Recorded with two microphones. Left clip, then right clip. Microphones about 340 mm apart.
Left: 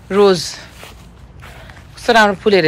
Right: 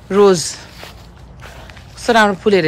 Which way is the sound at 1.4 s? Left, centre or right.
Centre.